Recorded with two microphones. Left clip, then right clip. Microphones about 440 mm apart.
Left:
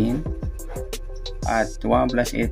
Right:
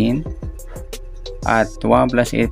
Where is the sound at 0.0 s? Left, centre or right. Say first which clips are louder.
Right 4 dB; centre.